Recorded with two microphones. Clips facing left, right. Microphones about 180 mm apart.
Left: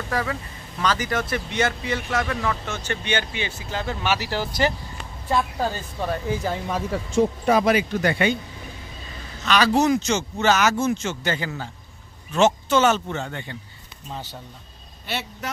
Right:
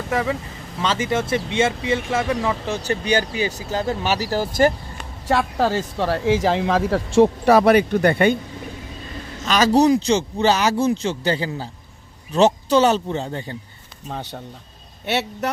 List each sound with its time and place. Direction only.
0.1 s speech: 20° right (ahead or behind); by 4.7 s 45° right (ahead or behind)
5.2 s speech: 85° right; by 8.4 s 55° right (ahead or behind)
9.4 s speech: 40° right (ahead or behind)
14.0 s a man's voice: 60° right (ahead or behind)